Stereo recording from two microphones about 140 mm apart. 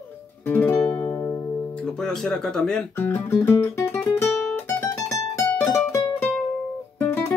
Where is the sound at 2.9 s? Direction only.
15° left (ahead or behind).